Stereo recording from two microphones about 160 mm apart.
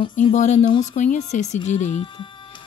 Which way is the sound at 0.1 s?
50° left (ahead or behind).